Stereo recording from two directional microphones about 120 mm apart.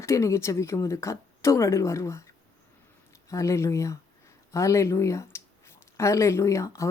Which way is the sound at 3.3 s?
25° left (ahead or behind).